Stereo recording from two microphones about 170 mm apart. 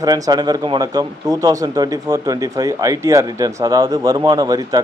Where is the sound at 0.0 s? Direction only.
20° right (ahead or behind).